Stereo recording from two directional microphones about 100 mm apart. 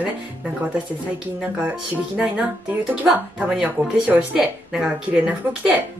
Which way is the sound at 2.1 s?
15° right (ahead or behind).